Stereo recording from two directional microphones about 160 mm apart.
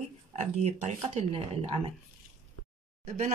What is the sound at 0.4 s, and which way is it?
Speech, 40° right (ahead or behind).